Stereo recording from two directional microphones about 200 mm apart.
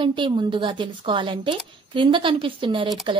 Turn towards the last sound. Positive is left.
turn(degrees=-25)  # may be behind; listen again after turning